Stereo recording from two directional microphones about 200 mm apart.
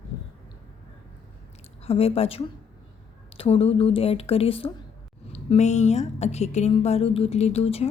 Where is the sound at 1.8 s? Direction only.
30° left (ahead or behind).